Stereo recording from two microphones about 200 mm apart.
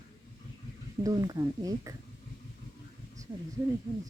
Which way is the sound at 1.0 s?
20° right (ahead or behind).